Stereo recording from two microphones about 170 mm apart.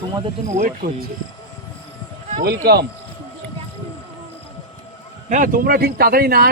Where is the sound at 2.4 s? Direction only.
70° right (ahead or behind).